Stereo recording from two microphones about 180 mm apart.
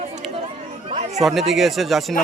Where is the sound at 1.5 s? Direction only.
Centre (ahead or behind).